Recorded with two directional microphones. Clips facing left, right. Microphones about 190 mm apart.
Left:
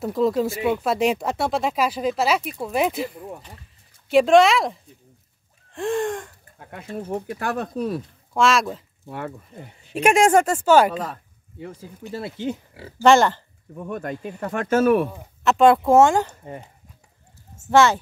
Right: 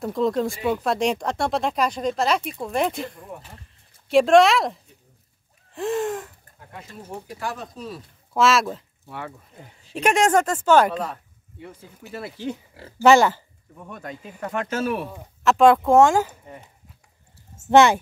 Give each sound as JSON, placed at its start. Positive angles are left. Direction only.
{"t": 0.0, "sound": "speech", "side_deg": 5}
{"t": 6.7, "sound": "speech", "side_deg": 60}
{"t": 8.3, "sound": "speech", "side_deg": 0}
{"t": 9.9, "sound": "speech", "side_deg": 10}
{"t": 12.1, "sound": "speech", "side_deg": 25}
{"t": 13.0, "sound": "speech", "side_deg": -5}
{"t": 13.8, "sound": "speech", "side_deg": 50}
{"t": 15.1, "sound": "speech", "side_deg": 0}
{"t": 17.6, "sound": "speech", "side_deg": -15}